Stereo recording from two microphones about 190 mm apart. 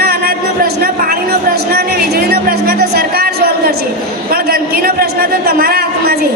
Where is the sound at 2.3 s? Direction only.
55° right (ahead or behind).